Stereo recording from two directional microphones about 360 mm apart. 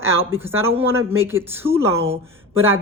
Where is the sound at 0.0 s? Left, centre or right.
Centre.